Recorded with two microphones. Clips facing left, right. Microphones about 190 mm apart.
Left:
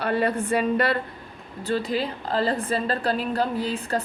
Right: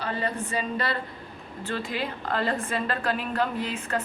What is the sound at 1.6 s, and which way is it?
A woman's voice, 35° left (ahead or behind).